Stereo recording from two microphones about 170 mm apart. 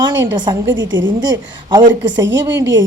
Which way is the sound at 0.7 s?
90° right.